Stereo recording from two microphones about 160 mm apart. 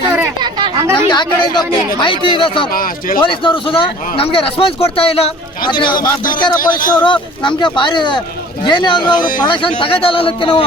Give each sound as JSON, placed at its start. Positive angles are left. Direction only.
{"t": 0.3, "sound": "chatter", "side_deg": -25}
{"t": 1.1, "sound": "a man's voice", "side_deg": 25}
{"t": 2.7, "sound": "speech", "side_deg": 60}
{"t": 3.2, "sound": "a man's voice", "side_deg": 30}
{"t": 6.0, "sound": "speech", "side_deg": 60}
{"t": 7.0, "sound": "a man's voice", "side_deg": 30}